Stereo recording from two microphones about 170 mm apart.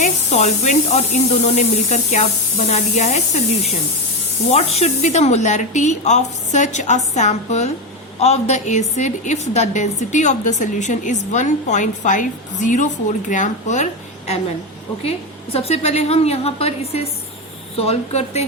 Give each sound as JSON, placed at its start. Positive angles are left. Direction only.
{"t": 0.0, "sound": "a woman's voice", "side_deg": 45}
{"t": 4.8, "sound": "a woman's voice", "side_deg": 40}
{"t": 15.5, "sound": "a woman's voice", "side_deg": 35}